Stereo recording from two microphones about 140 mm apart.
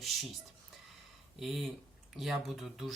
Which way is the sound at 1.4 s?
Centre (ahead or behind).